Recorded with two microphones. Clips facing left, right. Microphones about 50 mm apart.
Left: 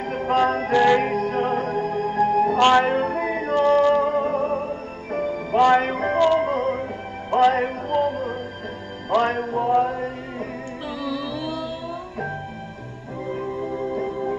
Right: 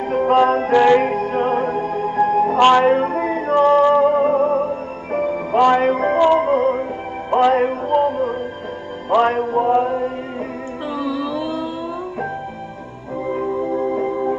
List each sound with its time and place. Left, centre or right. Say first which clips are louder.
0.0 s music: right 6 dB; right
6.1 s music: right 3 dB; centre
6.4 s music: right 6 dB; right
13.7 s music: right 6 dB; right